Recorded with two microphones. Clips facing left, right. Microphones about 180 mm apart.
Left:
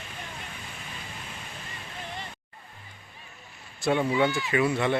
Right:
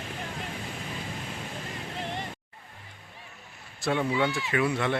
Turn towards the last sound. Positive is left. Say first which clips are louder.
# left 2 dB
turn(degrees=0)  # may be behind; listen again after turning